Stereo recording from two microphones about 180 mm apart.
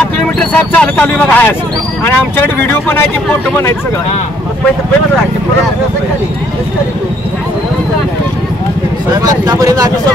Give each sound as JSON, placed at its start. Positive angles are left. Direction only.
{"t": 0.4, "sound": "speech", "side_deg": 5}
{"t": 9.1, "sound": "speech", "side_deg": -20}